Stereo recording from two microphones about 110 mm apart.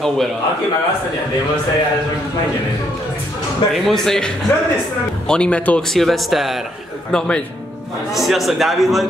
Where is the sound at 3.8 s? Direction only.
5° left (ahead or behind).